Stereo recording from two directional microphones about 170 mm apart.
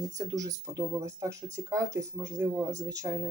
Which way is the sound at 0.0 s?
20° right (ahead or behind).